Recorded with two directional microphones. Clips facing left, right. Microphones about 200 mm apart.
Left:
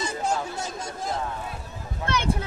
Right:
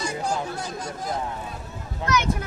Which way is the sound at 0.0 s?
25° left (ahead or behind).